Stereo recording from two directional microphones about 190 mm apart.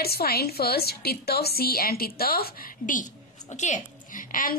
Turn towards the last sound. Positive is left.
turn(degrees=45)  # may be behind; listen again after turning